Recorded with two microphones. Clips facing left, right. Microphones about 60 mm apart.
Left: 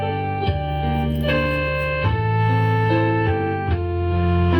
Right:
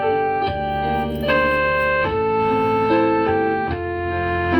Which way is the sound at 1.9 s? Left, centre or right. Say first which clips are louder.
Right 5 dB; right.